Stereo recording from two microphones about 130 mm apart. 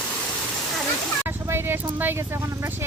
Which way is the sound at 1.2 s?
15° right (ahead or behind).